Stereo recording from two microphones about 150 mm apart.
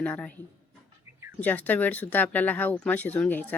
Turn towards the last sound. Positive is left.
turn(degrees=10)  # may be behind; listen again after turning